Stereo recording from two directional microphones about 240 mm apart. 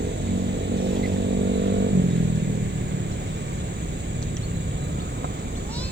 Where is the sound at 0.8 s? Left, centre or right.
Right.